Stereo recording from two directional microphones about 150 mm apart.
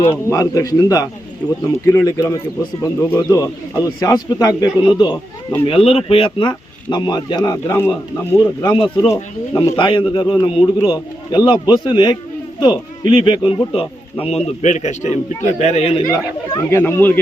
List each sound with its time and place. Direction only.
0.3 s a man's voice: 20° left (ahead or behind); by 16.0 s 40° left (ahead or behind)
16.6 s speech: 15° left (ahead or behind)